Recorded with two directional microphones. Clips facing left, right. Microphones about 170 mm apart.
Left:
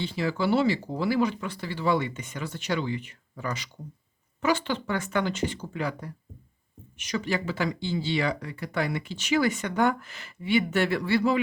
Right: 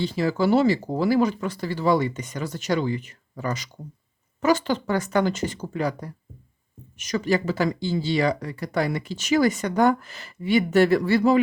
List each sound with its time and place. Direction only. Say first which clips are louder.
0.0 s speech: right 5 dB; 40° right (ahead or behind)